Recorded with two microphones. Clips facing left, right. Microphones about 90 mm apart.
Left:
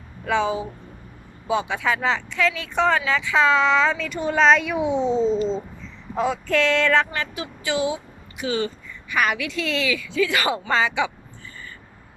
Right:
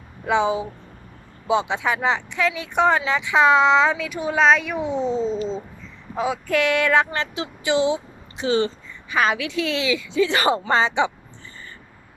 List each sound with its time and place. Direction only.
0.3 s speech: 20° right (ahead or behind)